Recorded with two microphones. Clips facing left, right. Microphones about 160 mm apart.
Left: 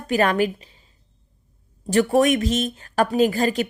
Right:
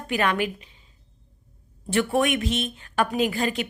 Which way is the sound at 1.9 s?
40° left (ahead or behind).